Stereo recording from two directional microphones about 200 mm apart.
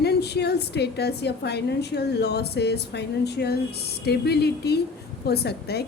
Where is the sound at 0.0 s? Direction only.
55° left (ahead or behind).